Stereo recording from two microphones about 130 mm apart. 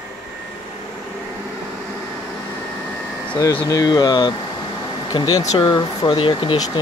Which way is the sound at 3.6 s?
30° left (ahead or behind).